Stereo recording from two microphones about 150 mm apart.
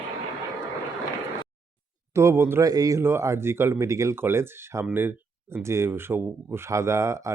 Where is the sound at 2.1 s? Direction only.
15° right (ahead or behind).